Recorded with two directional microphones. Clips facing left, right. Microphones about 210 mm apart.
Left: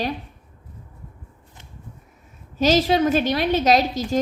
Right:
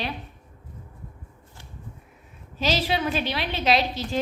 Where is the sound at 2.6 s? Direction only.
45° left (ahead or behind).